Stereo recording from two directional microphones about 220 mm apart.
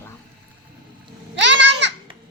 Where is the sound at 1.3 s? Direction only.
55° right (ahead or behind).